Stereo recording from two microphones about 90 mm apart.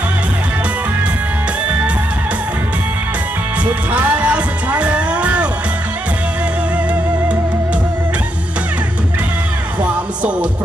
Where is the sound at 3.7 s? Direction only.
15° right (ahead or behind).